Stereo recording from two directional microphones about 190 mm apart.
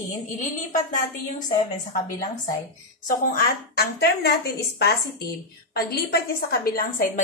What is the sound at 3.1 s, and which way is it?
A woman's voice, 55° left (ahead or behind).